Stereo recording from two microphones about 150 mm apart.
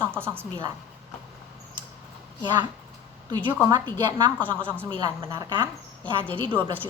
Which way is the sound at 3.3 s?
30° right (ahead or behind).